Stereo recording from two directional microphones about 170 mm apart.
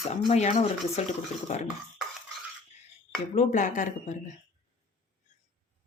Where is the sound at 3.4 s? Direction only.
45° left (ahead or behind).